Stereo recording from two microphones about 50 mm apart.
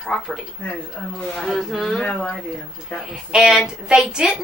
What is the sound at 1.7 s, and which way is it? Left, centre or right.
Speech, centre.